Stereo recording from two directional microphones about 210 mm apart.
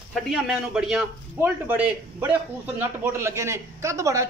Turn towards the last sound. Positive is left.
turn(degrees=-15)  # may be behind; listen again after turning